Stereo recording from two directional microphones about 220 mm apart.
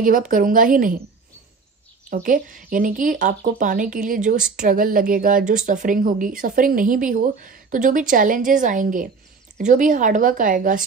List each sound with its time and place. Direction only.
0.0 s speech: 35° right (ahead or behind)
2.0 s speech: 40° right (ahead or behind)